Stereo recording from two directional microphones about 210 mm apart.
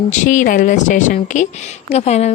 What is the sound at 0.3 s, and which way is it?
A woman's voice, 40° left (ahead or behind).